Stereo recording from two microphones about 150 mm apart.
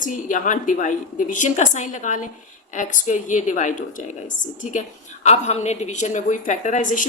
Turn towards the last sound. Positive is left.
turn(degrees=60)  # may be behind; listen again after turning